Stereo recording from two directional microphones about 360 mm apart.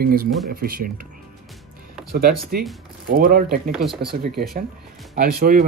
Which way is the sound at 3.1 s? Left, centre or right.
Right.